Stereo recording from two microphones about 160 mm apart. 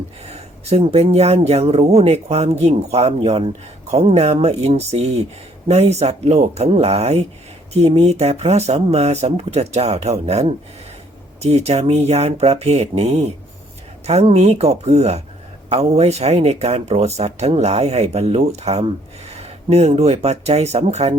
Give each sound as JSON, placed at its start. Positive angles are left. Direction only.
{"t": 0.3, "sound": "speech", "side_deg": -40}